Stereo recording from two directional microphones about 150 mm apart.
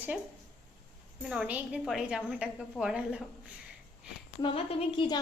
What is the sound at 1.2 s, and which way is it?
A woman's voice, 10° right (ahead or behind).